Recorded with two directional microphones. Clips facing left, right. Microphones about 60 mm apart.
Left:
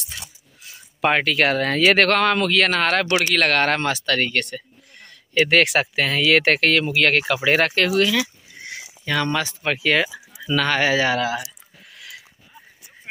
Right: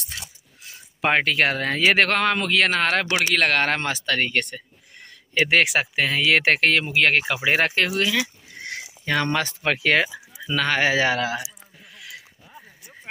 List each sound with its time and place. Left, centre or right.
1.1 s speech: right
3.1 s speech: centre
5.6 s speech: centre
6.2 s speech: right
8.5 s a sound: right
9.0 s speech: right
10.4 s speech: right